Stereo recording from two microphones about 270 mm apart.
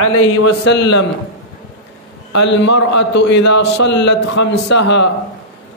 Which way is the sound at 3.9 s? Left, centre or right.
Left.